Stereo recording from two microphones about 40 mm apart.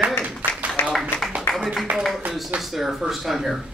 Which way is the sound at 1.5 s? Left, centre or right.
Centre.